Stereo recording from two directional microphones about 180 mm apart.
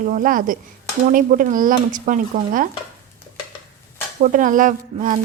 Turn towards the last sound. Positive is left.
turn(degrees=-45)  # may be behind; listen again after turning